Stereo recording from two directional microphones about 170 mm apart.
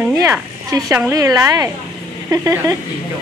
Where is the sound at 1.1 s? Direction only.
20° right (ahead or behind).